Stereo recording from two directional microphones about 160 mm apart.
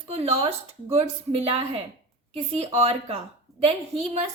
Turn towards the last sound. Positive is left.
turn(degrees=-35)  # may be behind; listen again after turning